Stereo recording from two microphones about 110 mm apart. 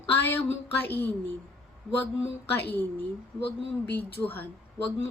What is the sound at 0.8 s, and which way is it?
Speech, 20° left (ahead or behind).